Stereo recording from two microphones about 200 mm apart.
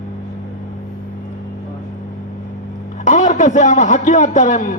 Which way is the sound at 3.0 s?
35° left (ahead or behind).